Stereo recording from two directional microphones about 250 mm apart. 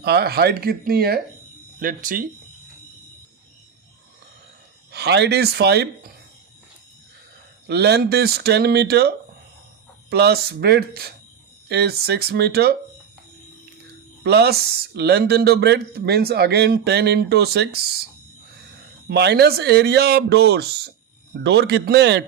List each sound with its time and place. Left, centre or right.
0.0 s speech: right
4.9 s speech: right
7.7 s speech: right
14.3 s speech: right
19.0 s speech: right